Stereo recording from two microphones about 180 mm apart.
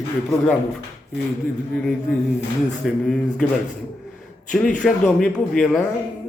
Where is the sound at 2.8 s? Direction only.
5° left (ahead or behind).